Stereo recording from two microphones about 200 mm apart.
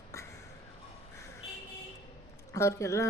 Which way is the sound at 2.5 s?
15° left (ahead or behind).